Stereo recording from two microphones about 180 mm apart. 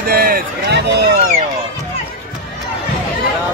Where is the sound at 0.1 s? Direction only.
55° right (ahead or behind).